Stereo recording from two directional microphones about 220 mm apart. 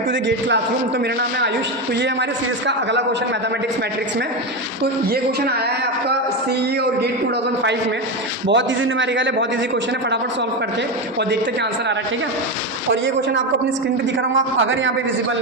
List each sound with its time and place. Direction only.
0.1 s a man's voice: 55° right (ahead or behind)
2.6 s a man's voice: 50° right (ahead or behind)
4.8 s a man's voice: 45° right (ahead or behind)
8.4 s a man's voice: 55° right (ahead or behind)
14.3 s a man's voice: 60° right (ahead or behind)